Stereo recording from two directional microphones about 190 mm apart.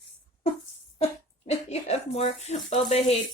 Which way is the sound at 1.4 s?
35° left (ahead or behind).